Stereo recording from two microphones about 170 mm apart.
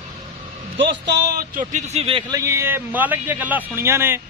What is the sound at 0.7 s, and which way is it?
A man's voice, 85° right.